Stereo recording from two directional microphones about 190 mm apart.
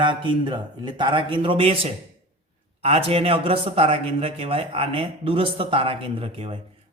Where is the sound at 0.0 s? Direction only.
25° right (ahead or behind).